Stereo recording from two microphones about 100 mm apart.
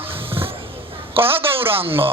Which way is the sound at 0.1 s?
65° right (ahead or behind).